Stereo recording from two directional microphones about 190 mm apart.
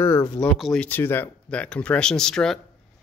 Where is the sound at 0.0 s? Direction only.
15° left (ahead or behind).